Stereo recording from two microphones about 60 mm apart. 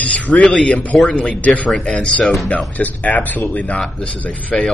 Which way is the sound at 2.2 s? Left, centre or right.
Centre.